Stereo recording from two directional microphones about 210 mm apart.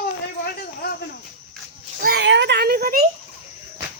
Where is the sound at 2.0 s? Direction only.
50° right (ahead or behind).